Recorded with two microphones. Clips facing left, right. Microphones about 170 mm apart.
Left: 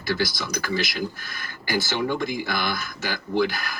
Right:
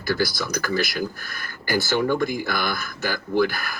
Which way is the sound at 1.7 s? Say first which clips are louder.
Right 3 dB; 50° right (ahead or behind).